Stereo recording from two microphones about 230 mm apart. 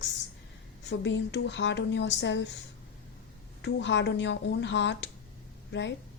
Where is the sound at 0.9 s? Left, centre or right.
Left.